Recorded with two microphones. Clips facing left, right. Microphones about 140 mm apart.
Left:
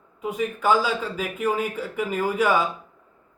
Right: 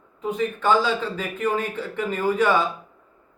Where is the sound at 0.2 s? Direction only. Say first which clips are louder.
Right 1 dB; 10° left (ahead or behind).